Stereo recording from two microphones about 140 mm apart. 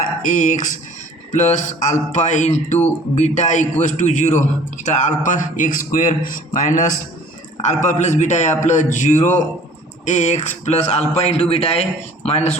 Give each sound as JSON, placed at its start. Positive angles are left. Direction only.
{"t": 0.2, "sound": "a man's voice", "side_deg": 60}